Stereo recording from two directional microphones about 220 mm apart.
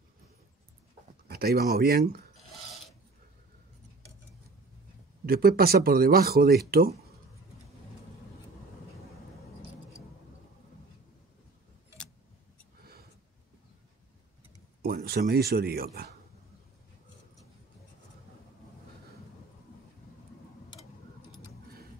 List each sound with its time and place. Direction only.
1.2 s speech: 45° right (ahead or behind)
2.3 s a sound: centre (ahead or behind)
5.2 s speech: 45° right (ahead or behind)
14.8 s speech: 40° right (ahead or behind)